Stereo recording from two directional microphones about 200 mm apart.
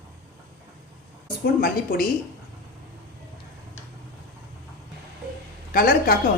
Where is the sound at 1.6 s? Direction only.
45° left (ahead or behind).